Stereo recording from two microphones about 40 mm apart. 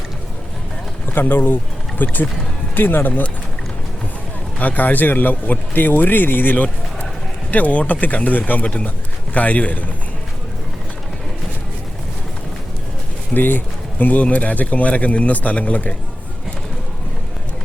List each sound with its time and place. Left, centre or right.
1.1 s a man's voice: left
4.6 s a man's voice: left
13.3 s speech: left
14.0 s speech: left